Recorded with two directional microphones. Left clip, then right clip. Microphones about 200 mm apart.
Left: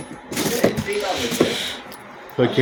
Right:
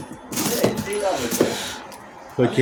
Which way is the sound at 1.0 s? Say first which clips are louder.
Even; 20° right (ahead or behind).